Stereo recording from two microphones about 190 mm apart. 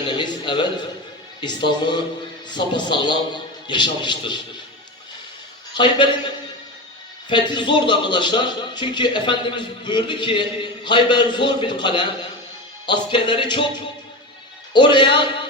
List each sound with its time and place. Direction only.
0.1 s a man's voice: 25° left (ahead or behind)
5.7 s a man's voice: 25° left (ahead or behind)